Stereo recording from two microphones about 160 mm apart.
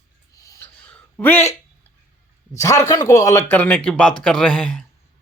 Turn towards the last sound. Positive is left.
turn(degrees=0)  # may be behind; listen again after turning